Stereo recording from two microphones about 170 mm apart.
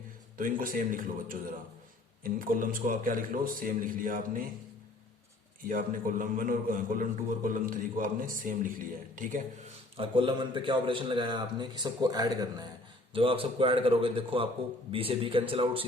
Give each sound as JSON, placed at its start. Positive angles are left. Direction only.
{"t": 0.3, "sound": "a man's voice", "side_deg": -55}
{"t": 5.6, "sound": "a man's voice", "side_deg": -55}
{"t": 10.0, "sound": "a man's voice", "side_deg": -30}